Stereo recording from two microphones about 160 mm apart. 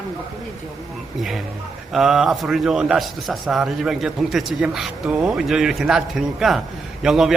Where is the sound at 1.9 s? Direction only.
Centre (ahead or behind).